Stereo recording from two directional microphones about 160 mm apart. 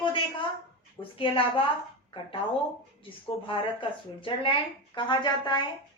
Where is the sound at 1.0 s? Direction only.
35° left (ahead or behind).